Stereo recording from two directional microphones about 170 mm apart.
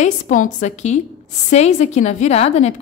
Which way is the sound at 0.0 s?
50° left (ahead or behind).